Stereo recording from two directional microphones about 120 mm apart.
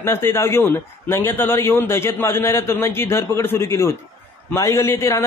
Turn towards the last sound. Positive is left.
turn(degrees=25)  # may be behind; listen again after turning